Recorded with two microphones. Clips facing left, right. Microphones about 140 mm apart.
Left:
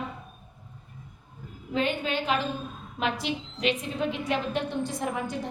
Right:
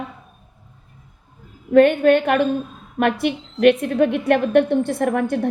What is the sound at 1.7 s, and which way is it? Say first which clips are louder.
A woman's voice: right 15 dB; 60° right (ahead or behind).